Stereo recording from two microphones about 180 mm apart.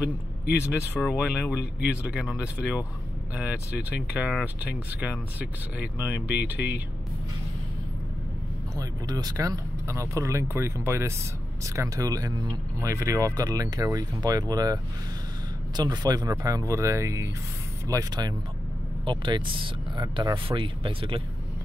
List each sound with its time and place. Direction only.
1.0 s speech: 5° right (ahead or behind)
8.7 s speech: 20° right (ahead or behind)